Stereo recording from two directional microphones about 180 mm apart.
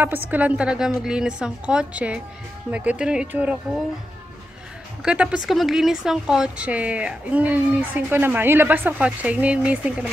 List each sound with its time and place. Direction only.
0.0 s a woman's voice: 10° right (ahead or behind)
5.0 s speech: 5° right (ahead or behind)